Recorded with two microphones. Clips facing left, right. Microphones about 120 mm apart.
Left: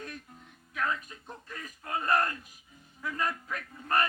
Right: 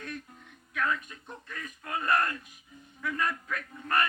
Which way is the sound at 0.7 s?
30° left (ahead or behind).